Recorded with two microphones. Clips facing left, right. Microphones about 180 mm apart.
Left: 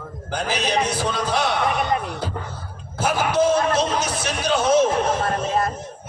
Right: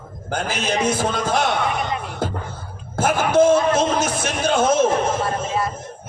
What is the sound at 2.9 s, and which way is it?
A man's voice, 50° right (ahead or behind).